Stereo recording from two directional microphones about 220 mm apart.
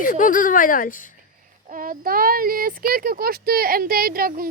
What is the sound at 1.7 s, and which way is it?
Speech, 40° right (ahead or behind).